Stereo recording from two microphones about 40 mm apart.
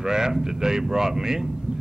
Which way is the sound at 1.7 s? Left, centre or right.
Right.